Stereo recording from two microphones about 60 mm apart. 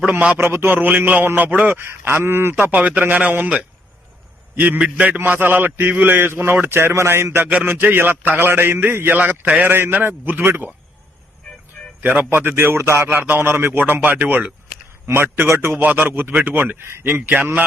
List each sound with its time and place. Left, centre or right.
0.3 s a man's voice: right
2.6 s a man's voice: right
4.5 s a man's voice: right
9.1 s a man's voice: right
12.3 s a man's voice: right
13.1 s a man's voice: right
15.8 s a man's voice: right